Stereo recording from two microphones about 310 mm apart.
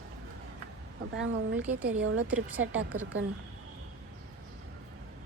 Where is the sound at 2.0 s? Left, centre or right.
Right.